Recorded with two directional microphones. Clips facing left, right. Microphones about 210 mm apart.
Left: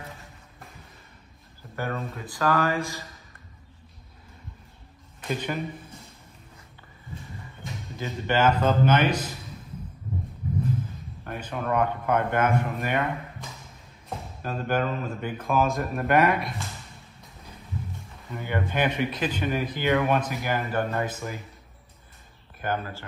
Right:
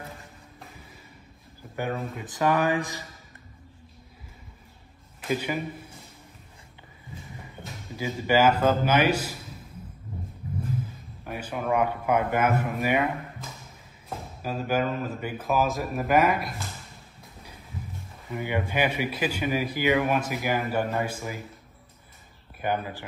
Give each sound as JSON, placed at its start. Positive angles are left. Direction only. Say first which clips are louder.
{"t": 1.8, "sound": "speech", "louder": "right 1 dB", "side_deg": -15}
{"t": 5.3, "sound": "speech", "louder": "right 2 dB", "side_deg": -5}
{"t": 7.6, "sound": "speech", "louder": "right 2 dB", "side_deg": -5}
{"t": 11.2, "sound": "speech", "louder": "right 1 dB", "side_deg": -10}
{"t": 18.3, "sound": "speech", "louder": "right 1 dB", "side_deg": -15}
{"t": 22.6, "sound": "speech", "louder": "right 1 dB", "side_deg": -10}